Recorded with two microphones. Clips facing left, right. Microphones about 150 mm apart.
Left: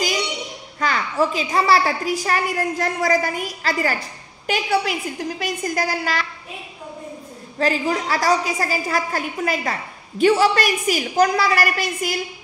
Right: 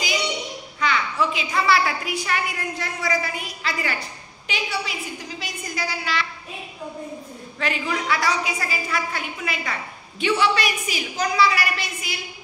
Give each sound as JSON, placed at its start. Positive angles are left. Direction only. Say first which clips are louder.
{"t": 0.7, "sound": "a child's voice", "louder": "left 3 dB", "side_deg": 40}
{"t": 4.5, "sound": "a woman's voice", "louder": "left 8 dB", "side_deg": 50}
{"t": 7.5, "sound": "a woman's voice", "louder": "left 6 dB", "side_deg": 35}